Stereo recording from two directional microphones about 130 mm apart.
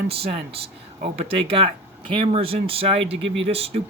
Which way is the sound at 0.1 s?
50° right (ahead or behind).